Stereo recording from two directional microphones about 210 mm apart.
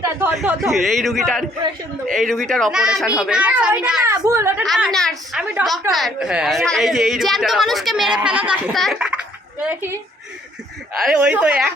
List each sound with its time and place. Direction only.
0.0 s speech: 10° right (ahead or behind)
4.6 s speech: centre (ahead or behind)
11.0 s speech: 5° right (ahead or behind)